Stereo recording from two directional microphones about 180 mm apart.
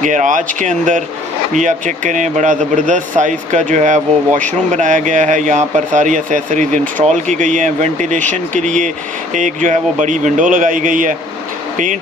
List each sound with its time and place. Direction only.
0.0 s speech: 45° right (ahead or behind)